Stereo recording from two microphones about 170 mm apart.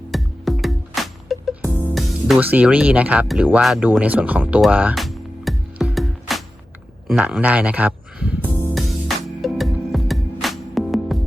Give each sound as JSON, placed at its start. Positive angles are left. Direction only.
{"t": 0.1, "sound": "music", "side_deg": 0}
{"t": 2.0, "sound": "speech", "side_deg": 0}
{"t": 8.7, "sound": "music", "side_deg": 0}